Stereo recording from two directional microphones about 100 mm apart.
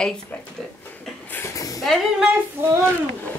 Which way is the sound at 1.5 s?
35° left (ahead or behind).